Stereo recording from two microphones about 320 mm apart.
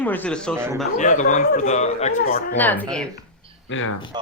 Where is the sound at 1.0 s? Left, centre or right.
Left.